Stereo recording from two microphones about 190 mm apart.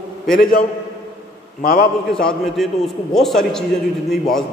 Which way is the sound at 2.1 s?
Centre (ahead or behind).